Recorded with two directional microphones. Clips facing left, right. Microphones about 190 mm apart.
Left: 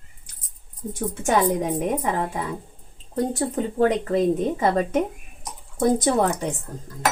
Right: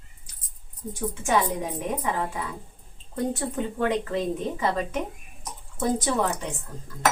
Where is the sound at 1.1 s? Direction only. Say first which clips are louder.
Left 4 dB; 45° left (ahead or behind).